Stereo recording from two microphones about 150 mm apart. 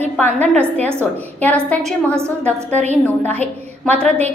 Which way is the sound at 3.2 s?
10° left (ahead or behind).